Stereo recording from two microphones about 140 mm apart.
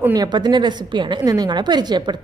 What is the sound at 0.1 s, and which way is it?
A woman's voice, 30° right (ahead or behind).